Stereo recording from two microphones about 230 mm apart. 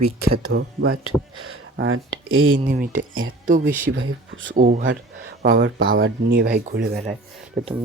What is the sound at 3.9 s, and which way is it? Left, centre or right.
Speech, right.